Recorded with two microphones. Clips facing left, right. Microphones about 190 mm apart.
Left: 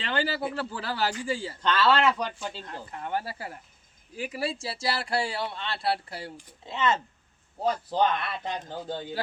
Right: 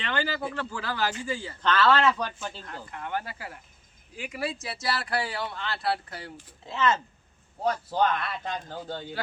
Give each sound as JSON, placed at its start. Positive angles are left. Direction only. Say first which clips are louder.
{"t": 0.0, "sound": "speech", "louder": "left 1 dB", "side_deg": 30}
{"t": 1.6, "sound": "speech", "louder": "right 1 dB", "side_deg": 10}
{"t": 2.6, "sound": "speech", "louder": "left 1 dB", "side_deg": 25}